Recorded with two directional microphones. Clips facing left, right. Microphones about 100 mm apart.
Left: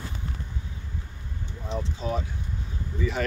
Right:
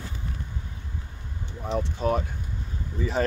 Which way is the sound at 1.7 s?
55° right (ahead or behind).